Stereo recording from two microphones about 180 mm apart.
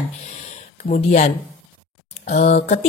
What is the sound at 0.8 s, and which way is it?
Speech, 40° left (ahead or behind).